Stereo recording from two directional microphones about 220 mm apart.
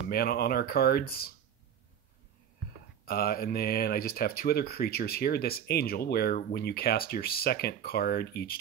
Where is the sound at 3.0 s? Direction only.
45° left (ahead or behind).